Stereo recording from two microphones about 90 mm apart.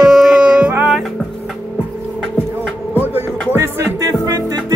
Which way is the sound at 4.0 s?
45° right (ahead or behind).